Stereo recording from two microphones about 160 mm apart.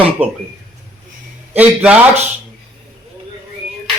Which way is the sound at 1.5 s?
5° right (ahead or behind).